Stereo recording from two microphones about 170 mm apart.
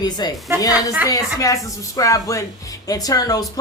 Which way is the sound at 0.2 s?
25° left (ahead or behind).